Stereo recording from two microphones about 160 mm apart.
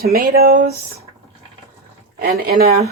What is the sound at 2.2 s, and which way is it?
Speech, 70° right (ahead or behind).